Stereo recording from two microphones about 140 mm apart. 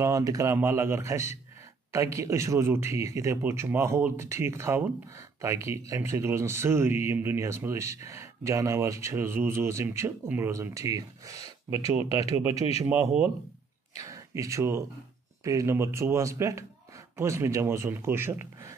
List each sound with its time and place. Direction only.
0.0 s speech: 25° right (ahead or behind)
13.9 s speech: 25° right (ahead or behind)